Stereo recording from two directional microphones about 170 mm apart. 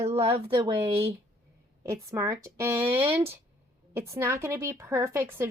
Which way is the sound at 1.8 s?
20° right (ahead or behind).